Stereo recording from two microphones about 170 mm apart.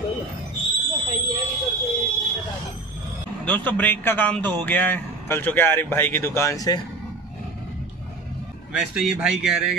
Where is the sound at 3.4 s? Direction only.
10° left (ahead or behind).